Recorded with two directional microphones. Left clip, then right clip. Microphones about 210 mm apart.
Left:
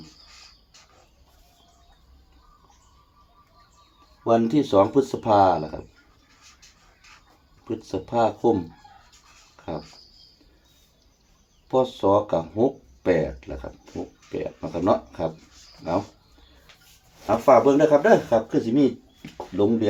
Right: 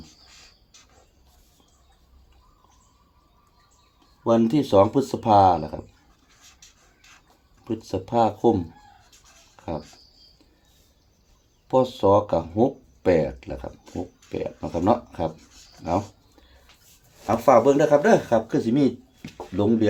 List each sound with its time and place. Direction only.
4.2 s speech: 55° right (ahead or behind)
7.6 s speech: 55° right (ahead or behind)
11.7 s speech: 55° right (ahead or behind)
17.2 s speech: 50° right (ahead or behind)